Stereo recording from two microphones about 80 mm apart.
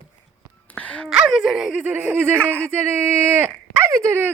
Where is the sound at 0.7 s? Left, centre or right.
Centre.